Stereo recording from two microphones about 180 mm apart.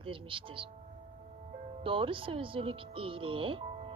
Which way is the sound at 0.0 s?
30° right (ahead or behind).